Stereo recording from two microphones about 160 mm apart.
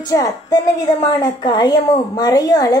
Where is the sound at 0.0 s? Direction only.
20° left (ahead or behind).